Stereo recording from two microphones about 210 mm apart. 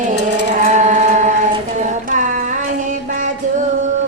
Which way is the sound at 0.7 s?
35° right (ahead or behind).